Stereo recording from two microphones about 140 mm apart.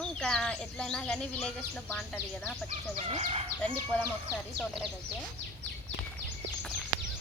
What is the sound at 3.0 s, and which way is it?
Speech, 45° right (ahead or behind).